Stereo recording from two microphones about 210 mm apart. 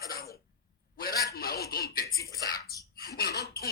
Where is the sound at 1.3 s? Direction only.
45° left (ahead or behind).